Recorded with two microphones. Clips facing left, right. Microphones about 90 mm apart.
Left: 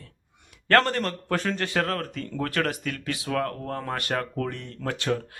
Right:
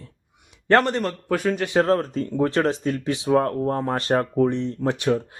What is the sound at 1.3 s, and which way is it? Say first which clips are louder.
Speech: right 6 dB; 10° right (ahead or behind).